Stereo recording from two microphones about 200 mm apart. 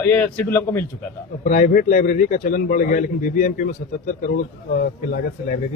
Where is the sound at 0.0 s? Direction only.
10° left (ahead or behind).